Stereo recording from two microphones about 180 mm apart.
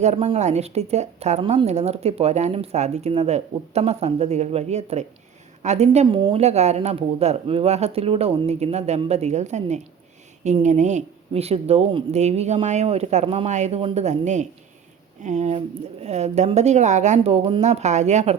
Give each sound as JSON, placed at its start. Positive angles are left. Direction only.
{"t": 0.0, "sound": "a woman's voice", "side_deg": -35}